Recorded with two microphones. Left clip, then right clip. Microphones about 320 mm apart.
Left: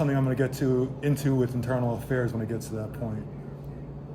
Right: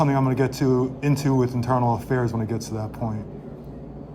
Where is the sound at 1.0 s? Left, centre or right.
Right.